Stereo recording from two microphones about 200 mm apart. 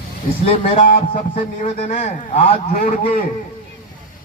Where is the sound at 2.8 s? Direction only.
45° left (ahead or behind).